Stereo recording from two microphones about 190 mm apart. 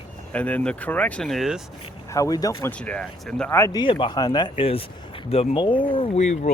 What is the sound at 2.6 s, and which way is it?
Speech, 10° left (ahead or behind).